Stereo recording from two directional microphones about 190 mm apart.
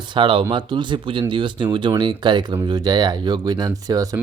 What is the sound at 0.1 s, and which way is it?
Speech, 25° right (ahead or behind).